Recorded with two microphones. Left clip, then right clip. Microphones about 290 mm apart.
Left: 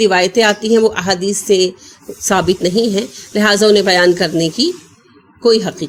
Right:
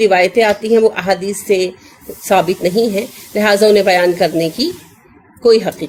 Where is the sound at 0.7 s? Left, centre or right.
Left.